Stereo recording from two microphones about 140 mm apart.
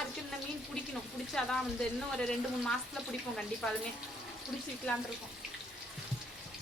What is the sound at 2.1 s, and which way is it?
Speech, 5° left (ahead or behind).